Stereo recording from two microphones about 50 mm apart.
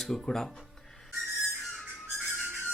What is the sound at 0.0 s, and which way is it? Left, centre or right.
Speech, centre.